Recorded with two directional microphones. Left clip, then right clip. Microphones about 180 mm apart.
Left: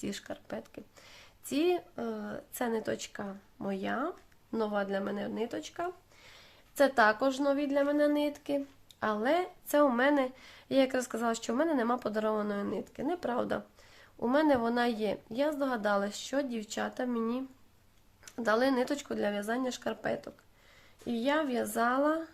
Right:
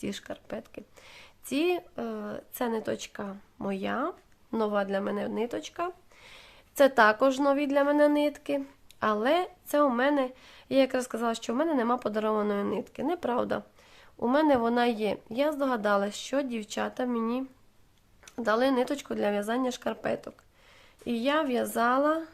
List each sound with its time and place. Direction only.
0.0 s speech: 25° right (ahead or behind)